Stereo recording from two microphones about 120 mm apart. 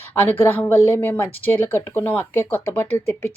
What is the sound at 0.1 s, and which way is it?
Speech, 15° left (ahead or behind).